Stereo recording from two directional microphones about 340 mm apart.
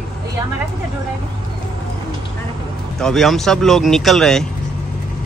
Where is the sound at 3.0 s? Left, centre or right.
Centre.